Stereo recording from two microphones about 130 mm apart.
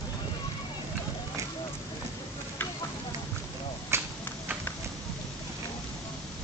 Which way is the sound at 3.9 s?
20° right (ahead or behind).